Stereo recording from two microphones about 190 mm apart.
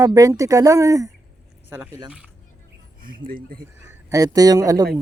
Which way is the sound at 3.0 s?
45° right (ahead or behind).